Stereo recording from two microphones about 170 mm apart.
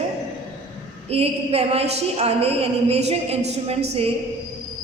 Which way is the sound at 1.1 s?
35° right (ahead or behind).